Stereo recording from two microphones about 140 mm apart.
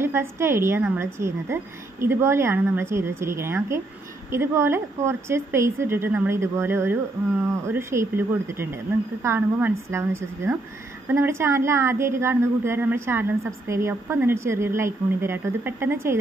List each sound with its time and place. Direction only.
0.0 s a woman's voice: 15° right (ahead or behind)